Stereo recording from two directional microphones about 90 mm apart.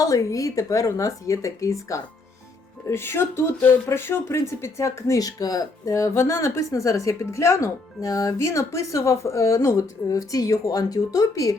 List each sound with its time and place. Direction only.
0.0 s speech: 40° left (ahead or behind)